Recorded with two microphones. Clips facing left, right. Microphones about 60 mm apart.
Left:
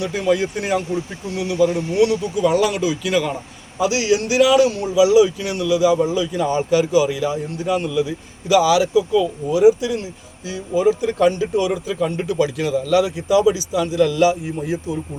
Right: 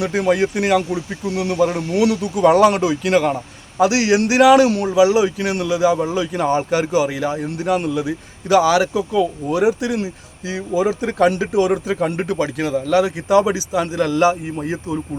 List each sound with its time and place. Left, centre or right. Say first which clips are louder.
0.0 s speech: right 2 dB; right
1.4 s speech: even; right
2.0 s speech: right 1 dB; right
3.8 s speech: right 3 dB; right
4.9 s speech: left 2 dB; right
7.5 s a man's voice: right 2 dB; right
8.0 s speech: right 1 dB; right
9.6 s speech: left 4 dB; right
12.4 s speech: left 4 dB; right
13.2 s speech: even; right